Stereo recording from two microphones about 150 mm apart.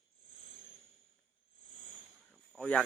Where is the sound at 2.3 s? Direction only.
5° left (ahead or behind).